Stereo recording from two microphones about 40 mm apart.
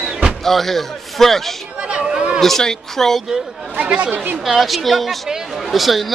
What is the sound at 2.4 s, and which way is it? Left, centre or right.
Speech, centre.